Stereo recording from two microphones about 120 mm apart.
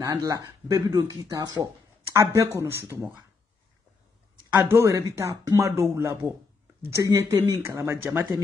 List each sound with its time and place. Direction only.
0.0 s speech: 25° right (ahead or behind)
4.6 s speech: 25° right (ahead or behind)